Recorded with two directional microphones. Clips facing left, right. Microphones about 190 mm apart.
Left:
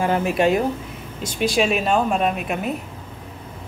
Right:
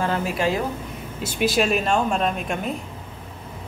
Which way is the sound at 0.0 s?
20° left (ahead or behind).